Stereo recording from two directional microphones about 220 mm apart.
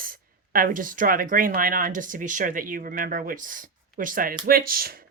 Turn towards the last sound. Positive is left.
turn(degrees=-40)  # may be behind; listen again after turning